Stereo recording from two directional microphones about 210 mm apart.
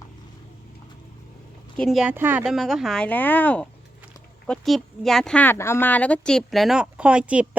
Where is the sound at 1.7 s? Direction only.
Centre (ahead or behind).